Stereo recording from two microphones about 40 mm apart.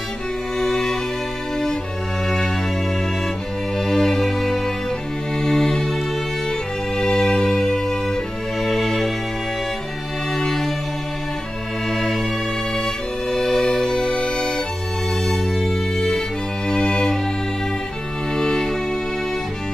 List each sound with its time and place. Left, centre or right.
0.6 s music: centre
2.2 s music: centre
3.8 s music: centre
7.0 s music: centre
10.3 s music: centre
11.9 s music: centre
18.3 s music: centre